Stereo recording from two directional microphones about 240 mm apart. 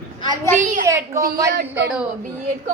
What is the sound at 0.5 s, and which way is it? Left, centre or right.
Speech, right.